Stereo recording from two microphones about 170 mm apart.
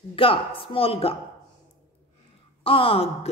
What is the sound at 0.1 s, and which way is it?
A woman's voice, 30° left (ahead or behind).